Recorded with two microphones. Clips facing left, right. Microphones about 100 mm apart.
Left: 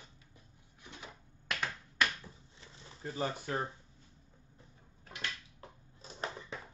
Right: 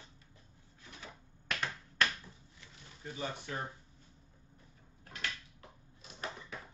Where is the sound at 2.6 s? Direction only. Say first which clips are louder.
Left 4 dB; 30° left (ahead or behind).